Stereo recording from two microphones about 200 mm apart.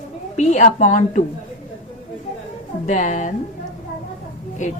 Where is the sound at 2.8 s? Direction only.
40° left (ahead or behind).